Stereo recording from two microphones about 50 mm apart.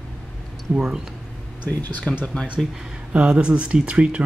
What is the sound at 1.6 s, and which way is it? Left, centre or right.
Speech, left.